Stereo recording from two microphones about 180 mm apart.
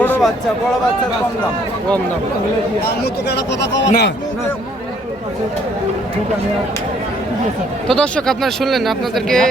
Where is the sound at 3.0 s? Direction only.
70° left (ahead or behind).